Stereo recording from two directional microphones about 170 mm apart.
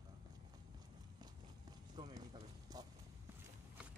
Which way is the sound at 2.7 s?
25° right (ahead or behind).